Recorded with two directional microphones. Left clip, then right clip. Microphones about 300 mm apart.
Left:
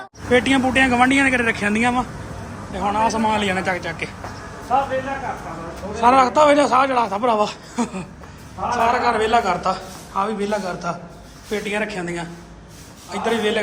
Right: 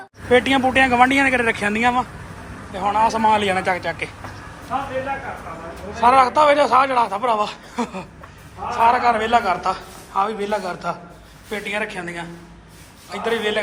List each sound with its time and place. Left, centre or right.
0.3 s a man's voice: centre
6.0 s a man's voice: centre